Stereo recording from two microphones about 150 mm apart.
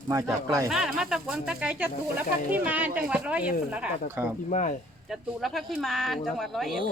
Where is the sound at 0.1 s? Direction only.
20° right (ahead or behind).